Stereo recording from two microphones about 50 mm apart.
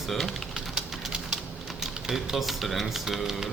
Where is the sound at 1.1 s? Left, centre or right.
Centre.